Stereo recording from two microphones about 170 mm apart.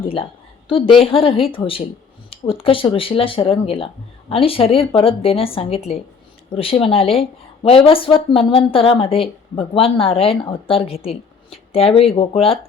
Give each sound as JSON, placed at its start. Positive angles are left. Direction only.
{"t": 0.0, "sound": "a woman's voice", "side_deg": 30}